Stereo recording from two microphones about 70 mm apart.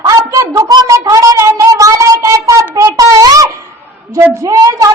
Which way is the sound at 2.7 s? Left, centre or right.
Right.